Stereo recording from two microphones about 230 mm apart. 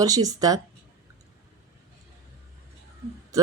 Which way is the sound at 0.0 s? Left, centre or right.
Centre.